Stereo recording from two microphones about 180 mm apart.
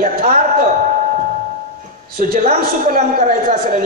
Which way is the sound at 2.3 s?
55° right (ahead or behind).